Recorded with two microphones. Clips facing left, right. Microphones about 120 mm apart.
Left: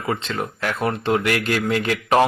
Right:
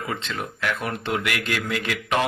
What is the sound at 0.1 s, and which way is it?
Speech, 35° left (ahead or behind).